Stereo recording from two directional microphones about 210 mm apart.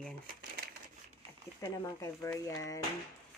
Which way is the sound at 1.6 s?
15° left (ahead or behind).